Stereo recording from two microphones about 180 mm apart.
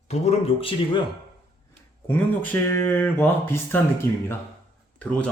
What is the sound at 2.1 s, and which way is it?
Speech, 10° left (ahead or behind).